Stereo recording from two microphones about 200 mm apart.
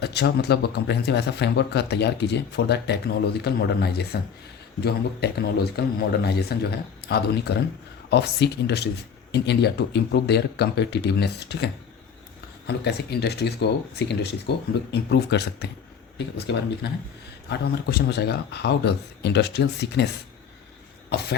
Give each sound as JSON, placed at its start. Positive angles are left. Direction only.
{"t": 0.0, "sound": "a man's voice", "side_deg": 55}